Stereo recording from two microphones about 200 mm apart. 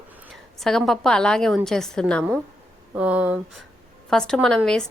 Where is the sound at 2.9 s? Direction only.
5° right (ahead or behind).